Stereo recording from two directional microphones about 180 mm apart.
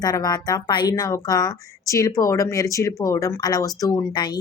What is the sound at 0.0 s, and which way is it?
Speech, 20° left (ahead or behind).